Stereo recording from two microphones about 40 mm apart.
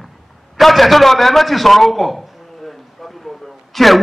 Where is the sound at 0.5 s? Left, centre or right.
Centre.